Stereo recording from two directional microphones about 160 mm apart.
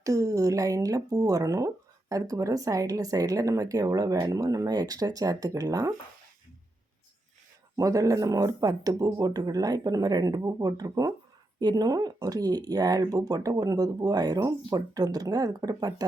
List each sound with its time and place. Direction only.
0.0 s speech: 20° right (ahead or behind)
7.8 s speech: 20° right (ahead or behind)